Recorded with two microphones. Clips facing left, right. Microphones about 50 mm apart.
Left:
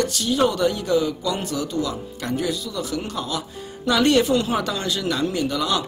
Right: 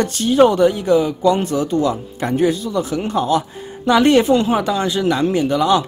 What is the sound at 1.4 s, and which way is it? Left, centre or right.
Speech, right.